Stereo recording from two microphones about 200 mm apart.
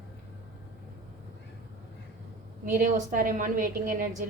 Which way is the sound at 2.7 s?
45° right (ahead or behind).